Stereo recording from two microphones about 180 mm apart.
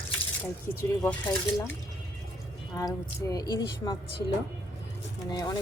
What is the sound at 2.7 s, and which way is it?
Speech, 20° left (ahead or behind).